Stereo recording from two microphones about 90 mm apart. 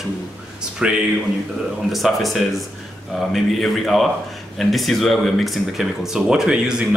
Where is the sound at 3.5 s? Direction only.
Centre (ahead or behind).